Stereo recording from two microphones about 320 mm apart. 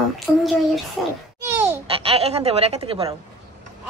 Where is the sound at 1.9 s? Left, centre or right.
Centre.